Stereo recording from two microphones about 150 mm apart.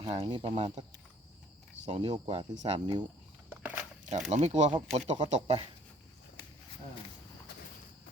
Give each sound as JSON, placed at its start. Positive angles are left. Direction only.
{"t": 0.0, "sound": "speech", "side_deg": -35}
{"t": 1.8, "sound": "speech", "side_deg": -40}
{"t": 2.6, "sound": "speech", "side_deg": -50}
{"t": 3.5, "sound": "a sound", "side_deg": -15}
{"t": 4.1, "sound": "speech", "side_deg": -50}